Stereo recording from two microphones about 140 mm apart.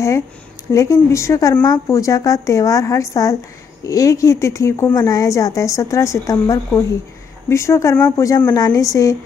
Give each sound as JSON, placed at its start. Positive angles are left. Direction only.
{"t": 0.7, "sound": "a woman's voice", "side_deg": 20}